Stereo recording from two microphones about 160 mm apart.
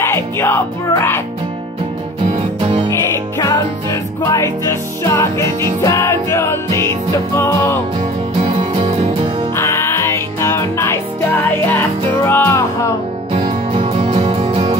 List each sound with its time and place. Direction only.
0.0 s music: 15° left (ahead or behind)
3.3 s music: 20° left (ahead or behind)
8.5 s music: 30° right (ahead or behind)
9.6 s music: 15° left (ahead or behind)
12.3 s music: 15° left (ahead or behind)
13.3 s music: 35° right (ahead or behind)